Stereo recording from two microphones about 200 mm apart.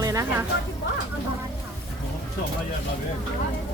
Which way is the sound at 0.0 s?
15° right (ahead or behind).